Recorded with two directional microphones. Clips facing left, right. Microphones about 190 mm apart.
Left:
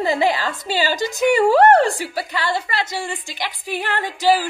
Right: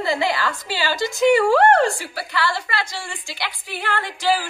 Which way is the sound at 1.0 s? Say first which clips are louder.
Right 2 dB; 15° left (ahead or behind).